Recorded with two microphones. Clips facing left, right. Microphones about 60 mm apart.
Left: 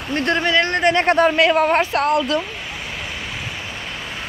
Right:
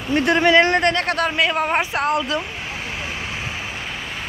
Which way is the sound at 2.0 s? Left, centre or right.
Right.